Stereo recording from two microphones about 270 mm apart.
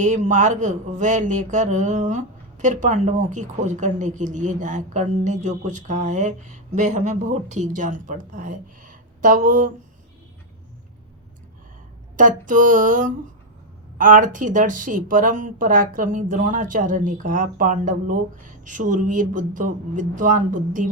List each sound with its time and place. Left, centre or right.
0.0 s speech: right
12.1 s speech: right